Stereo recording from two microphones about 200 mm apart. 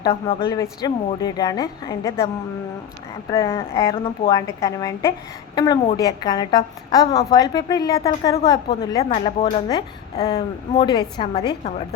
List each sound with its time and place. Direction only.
0.0 s a woman's voice: 30° left (ahead or behind)